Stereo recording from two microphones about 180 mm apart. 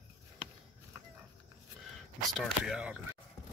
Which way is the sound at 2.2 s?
Centre (ahead or behind).